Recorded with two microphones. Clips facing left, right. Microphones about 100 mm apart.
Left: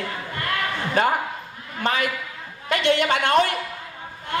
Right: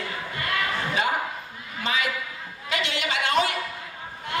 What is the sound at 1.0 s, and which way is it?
A man's voice, 45° left (ahead or behind).